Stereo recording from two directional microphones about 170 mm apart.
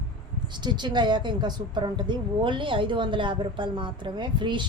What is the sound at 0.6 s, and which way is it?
A woman's voice, 25° right (ahead or behind).